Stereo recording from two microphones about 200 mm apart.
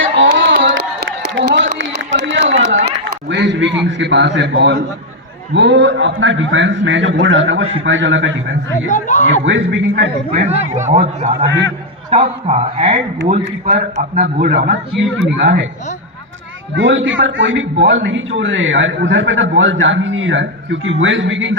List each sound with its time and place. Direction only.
0.0 s a sound: 70° right (ahead or behind)
3.8 s a man's voice: 65° right (ahead or behind)
8.9 s a man's voice: 40° left (ahead or behind)
9.5 s a man's voice: 70° right (ahead or behind)
9.9 s a man's voice: 40° right (ahead or behind)
14.0 s a man's voice: 40° right (ahead or behind)
15.4 s a man's voice: 55° right (ahead or behind)
16.7 s a man's voice: 70° right (ahead or behind)